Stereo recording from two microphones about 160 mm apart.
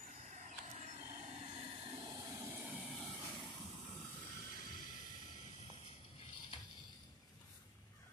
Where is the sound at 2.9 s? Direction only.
Centre (ahead or behind).